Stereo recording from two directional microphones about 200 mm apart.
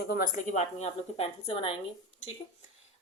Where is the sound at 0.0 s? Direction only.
50° left (ahead or behind).